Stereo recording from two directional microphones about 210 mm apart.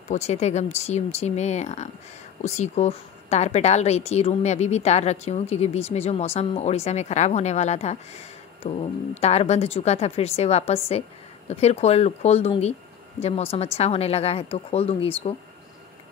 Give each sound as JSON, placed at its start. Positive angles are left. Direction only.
{"t": 0.1, "sound": "a woman's voice", "side_deg": 30}